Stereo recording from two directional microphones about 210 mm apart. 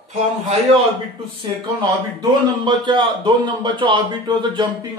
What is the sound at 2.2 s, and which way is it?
A man's voice, 20° right (ahead or behind).